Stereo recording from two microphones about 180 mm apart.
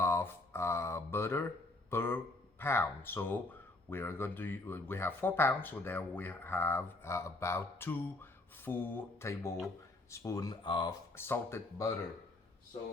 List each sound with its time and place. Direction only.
0.0 s a sound: 15° left (ahead or behind)
1.9 s speech: 10° left (ahead or behind)
11.2 s speech: 15° left (ahead or behind)